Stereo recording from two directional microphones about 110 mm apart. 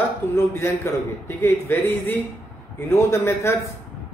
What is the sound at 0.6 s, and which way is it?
A man's voice, 25° left (ahead or behind).